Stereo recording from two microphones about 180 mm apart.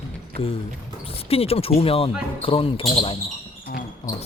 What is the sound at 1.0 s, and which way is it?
Speech, 35° left (ahead or behind).